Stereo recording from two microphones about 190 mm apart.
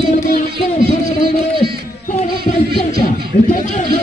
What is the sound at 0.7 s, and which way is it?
Heart murmur, 40° left (ahead or behind).